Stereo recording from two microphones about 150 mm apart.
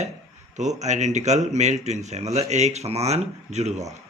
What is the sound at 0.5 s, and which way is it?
A man's voice, 50° right (ahead or behind).